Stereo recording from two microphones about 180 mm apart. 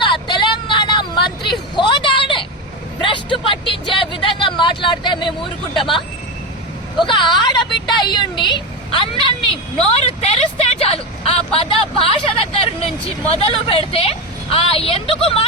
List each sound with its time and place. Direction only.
0.0 s vehicle: 25° left (ahead or behind)
3.0 s a sound: 25° left (ahead or behind)
7.0 s a woman's voice: 25° left (ahead or behind)